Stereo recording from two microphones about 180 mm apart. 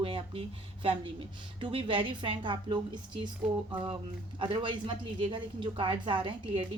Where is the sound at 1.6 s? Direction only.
30° right (ahead or behind).